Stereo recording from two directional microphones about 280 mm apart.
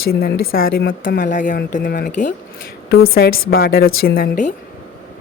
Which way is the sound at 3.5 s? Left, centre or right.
Left.